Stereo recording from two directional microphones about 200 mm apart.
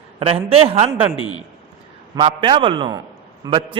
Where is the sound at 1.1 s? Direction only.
25° left (ahead or behind).